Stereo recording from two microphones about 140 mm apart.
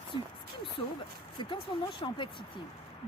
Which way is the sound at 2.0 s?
35° left (ahead or behind).